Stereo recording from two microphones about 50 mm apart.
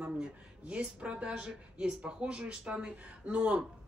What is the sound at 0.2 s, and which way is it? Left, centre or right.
A woman's voice, right.